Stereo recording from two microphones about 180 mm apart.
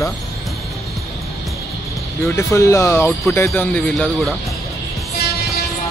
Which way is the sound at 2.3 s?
15° left (ahead or behind).